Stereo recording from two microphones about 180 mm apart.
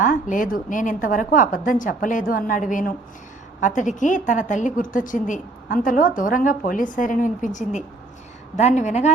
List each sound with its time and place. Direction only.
0.0 s a woman's voice: 45° left (ahead or behind)